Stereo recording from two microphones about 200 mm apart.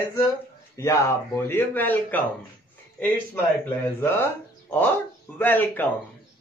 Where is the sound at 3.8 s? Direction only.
10° left (ahead or behind).